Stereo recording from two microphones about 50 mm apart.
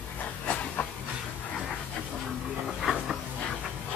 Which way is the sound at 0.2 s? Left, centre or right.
Left.